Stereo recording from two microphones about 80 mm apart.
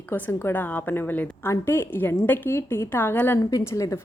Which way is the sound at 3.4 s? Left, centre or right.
Left.